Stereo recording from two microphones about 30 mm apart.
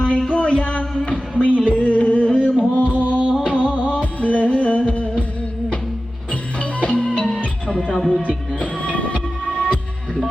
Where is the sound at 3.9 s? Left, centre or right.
Left.